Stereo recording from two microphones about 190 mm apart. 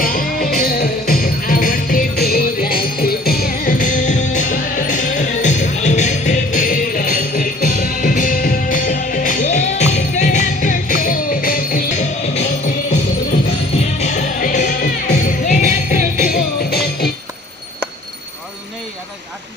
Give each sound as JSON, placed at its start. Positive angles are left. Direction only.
{"t": 0.0, "sound": "music", "side_deg": 50}
{"t": 14.0, "sound": "music", "side_deg": 40}